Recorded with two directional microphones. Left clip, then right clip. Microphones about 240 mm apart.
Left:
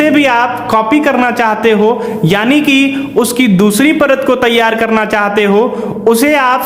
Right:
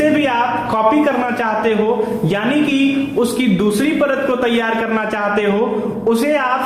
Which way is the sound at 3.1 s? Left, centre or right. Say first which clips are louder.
Left 6 dB; left.